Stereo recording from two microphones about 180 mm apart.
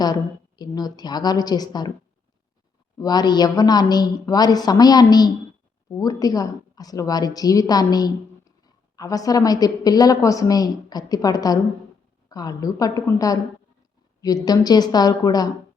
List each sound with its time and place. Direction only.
0.0 s a woman's voice: 25° left (ahead or behind)
3.0 s a woman's voice: 20° left (ahead or behind)